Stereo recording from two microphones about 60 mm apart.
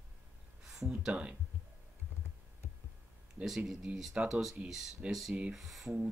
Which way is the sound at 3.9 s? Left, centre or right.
Centre.